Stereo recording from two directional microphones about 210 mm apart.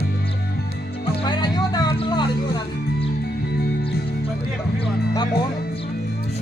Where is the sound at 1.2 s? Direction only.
20° left (ahead or behind).